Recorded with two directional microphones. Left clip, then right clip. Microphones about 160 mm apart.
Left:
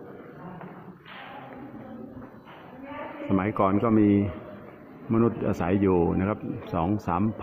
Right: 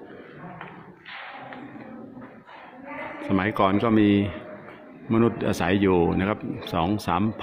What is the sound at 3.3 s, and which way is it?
A man's voice, 10° right (ahead or behind).